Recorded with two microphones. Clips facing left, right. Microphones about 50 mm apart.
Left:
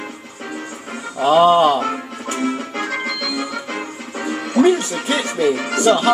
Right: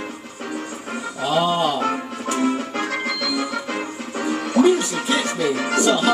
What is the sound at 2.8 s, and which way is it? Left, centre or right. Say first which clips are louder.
Music: left 1 dB; centre.